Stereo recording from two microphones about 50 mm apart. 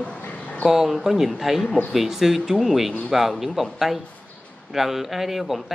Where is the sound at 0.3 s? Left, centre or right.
Left.